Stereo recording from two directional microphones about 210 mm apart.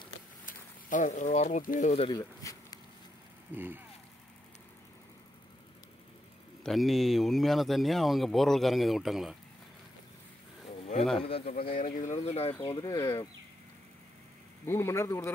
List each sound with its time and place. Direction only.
0.5 s speech: 40° left (ahead or behind)
2.0 s speech: 20° left (ahead or behind)
3.5 s speech: 10° right (ahead or behind)
6.6 s speech: centre (ahead or behind)
10.9 s speech: 35° left (ahead or behind)
12.6 s speech: 20° left (ahead or behind)
14.7 s speech: 10° left (ahead or behind)